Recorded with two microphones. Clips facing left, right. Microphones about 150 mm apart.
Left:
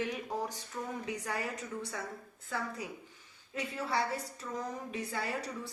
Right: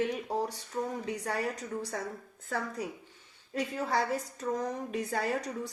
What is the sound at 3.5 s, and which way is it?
Speech, 45° right (ahead or behind).